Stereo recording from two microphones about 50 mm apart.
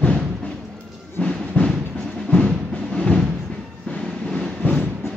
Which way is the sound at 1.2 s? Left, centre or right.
Centre.